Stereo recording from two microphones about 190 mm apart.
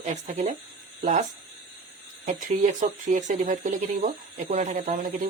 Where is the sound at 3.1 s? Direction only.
40° right (ahead or behind).